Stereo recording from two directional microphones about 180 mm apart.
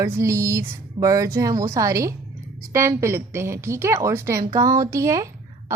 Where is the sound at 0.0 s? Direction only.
15° right (ahead or behind).